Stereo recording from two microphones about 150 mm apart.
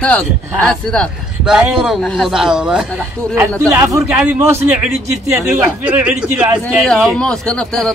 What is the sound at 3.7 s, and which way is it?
A man's voice, 20° right (ahead or behind).